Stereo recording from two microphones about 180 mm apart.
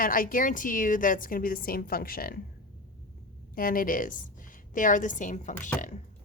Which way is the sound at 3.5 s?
50° left (ahead or behind).